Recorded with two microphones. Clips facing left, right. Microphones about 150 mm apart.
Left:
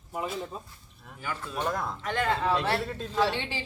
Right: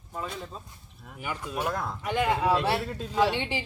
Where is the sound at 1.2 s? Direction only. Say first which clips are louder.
Right 1 dB; 15° right (ahead or behind); by 2.0 s centre (ahead or behind).